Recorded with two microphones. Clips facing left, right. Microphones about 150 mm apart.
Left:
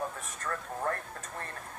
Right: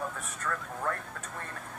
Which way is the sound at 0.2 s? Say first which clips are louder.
Right 1 dB; 35° left (ahead or behind).